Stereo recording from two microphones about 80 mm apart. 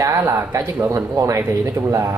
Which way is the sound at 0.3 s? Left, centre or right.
Right.